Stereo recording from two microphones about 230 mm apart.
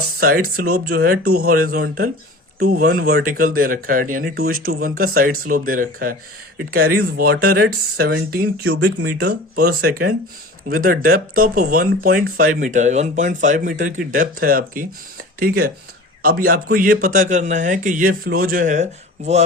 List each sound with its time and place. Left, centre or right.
0.2 s speech: right